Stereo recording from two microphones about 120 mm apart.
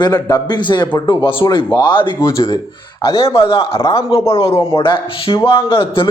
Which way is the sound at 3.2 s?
50° left (ahead or behind).